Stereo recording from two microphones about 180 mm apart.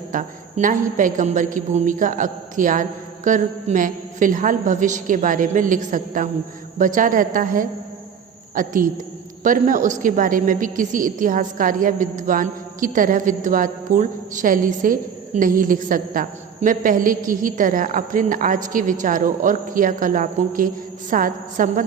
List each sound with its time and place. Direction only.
0.1 s a woman's voice: 45° right (ahead or behind)